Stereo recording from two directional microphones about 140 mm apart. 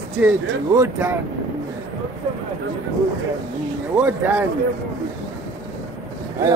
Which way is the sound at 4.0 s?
15° right (ahead or behind).